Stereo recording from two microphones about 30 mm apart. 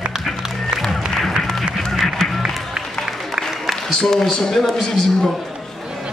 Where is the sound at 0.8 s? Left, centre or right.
Centre.